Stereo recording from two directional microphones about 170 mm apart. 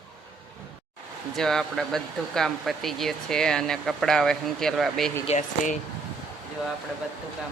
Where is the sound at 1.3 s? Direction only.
5° left (ahead or behind).